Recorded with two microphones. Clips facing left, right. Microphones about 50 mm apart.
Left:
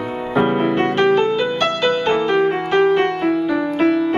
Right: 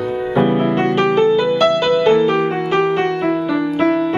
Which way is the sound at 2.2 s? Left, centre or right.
Centre.